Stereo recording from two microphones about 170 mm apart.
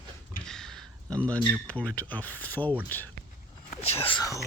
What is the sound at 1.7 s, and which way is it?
Speech, 10° left (ahead or behind).